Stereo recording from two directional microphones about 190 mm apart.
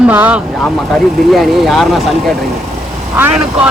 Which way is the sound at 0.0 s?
5° right (ahead or behind).